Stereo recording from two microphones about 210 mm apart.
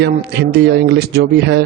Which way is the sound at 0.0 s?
50° right (ahead or behind).